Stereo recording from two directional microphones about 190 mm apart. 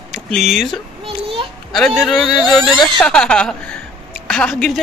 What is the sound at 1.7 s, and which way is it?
A man's voice, centre (ahead or behind).